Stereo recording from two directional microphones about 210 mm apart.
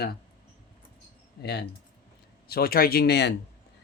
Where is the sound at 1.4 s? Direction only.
50° left (ahead or behind).